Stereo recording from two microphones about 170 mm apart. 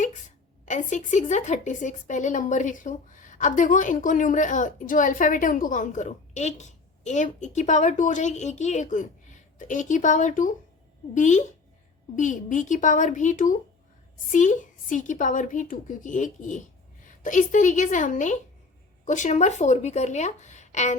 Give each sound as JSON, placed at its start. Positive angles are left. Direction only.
{"t": 0.0, "sound": "a woman's voice", "side_deg": 45}